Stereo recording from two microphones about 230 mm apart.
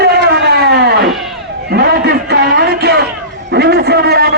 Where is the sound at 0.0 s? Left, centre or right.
Right.